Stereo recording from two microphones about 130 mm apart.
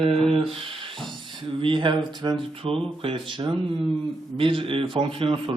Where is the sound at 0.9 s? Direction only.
Centre (ahead or behind).